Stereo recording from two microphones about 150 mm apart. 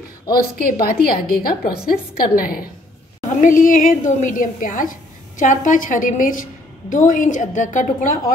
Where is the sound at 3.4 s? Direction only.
60° left (ahead or behind).